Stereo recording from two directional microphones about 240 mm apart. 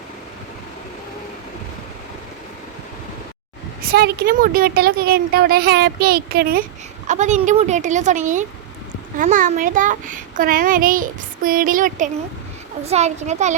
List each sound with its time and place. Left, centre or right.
3.8 s a child's voice: right